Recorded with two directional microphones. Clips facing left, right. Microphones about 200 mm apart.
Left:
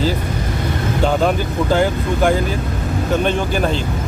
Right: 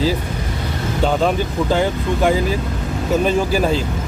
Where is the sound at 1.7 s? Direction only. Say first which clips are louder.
Left 2 dB; centre (ahead or behind).